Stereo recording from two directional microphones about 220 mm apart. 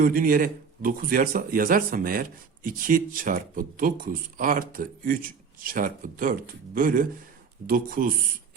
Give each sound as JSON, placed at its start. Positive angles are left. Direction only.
{"t": 0.0, "sound": "speech", "side_deg": -40}